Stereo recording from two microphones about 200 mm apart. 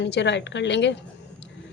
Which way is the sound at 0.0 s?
60° left (ahead or behind).